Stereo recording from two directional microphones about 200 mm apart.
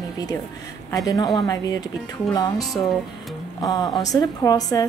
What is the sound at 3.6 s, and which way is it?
A woman's voice, 20° left (ahead or behind).